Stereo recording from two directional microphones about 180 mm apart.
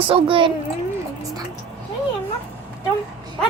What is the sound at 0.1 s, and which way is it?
Speech, 30° right (ahead or behind).